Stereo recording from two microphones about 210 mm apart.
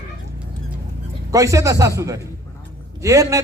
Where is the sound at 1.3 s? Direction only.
15° right (ahead or behind).